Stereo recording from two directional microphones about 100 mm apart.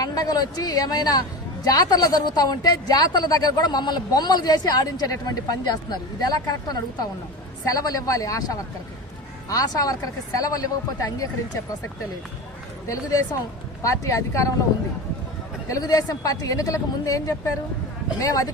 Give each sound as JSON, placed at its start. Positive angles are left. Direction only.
{"t": 0.0, "sound": "a woman's voice", "side_deg": 40}
{"t": 12.9, "sound": "a woman's voice", "side_deg": 35}
{"t": 15.7, "sound": "a woman's voice", "side_deg": 40}